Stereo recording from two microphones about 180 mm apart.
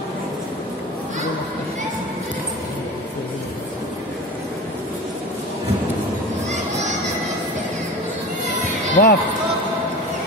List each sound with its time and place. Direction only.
9.0 s speech: 50° left (ahead or behind)